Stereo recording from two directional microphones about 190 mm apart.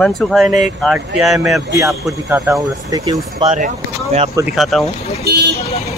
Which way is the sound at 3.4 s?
40° right (ahead or behind).